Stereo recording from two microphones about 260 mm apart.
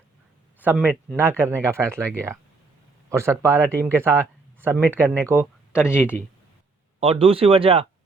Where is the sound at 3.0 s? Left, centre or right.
Centre.